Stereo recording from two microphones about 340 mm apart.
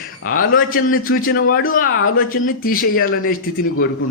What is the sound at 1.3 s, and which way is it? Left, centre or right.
Speech, left.